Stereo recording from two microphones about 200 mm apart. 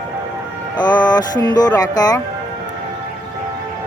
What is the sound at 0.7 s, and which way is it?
Speech, 20° left (ahead or behind).